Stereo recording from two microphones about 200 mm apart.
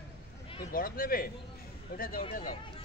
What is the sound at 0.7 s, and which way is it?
A man's voice, 45° left (ahead or behind).